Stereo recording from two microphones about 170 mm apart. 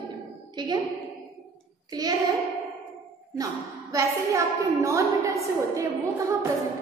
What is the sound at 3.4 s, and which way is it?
A woman's voice, 20° right (ahead or behind).